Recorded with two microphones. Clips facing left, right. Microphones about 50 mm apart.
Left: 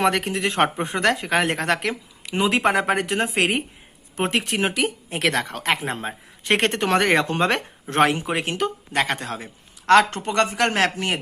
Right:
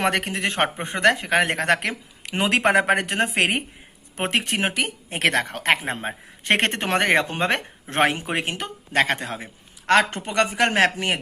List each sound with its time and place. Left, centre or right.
0.0 s speech: right
7.3 s speech: centre
7.9 s speech: right
8.9 s speech: right
9.1 s a man's voice: centre